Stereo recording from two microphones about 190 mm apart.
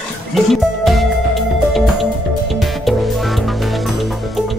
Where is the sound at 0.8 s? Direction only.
Centre (ahead or behind).